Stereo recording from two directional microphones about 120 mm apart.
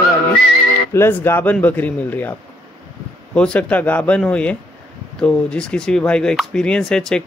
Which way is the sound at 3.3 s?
10° left (ahead or behind).